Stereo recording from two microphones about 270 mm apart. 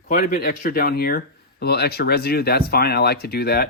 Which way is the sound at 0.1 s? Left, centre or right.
Left.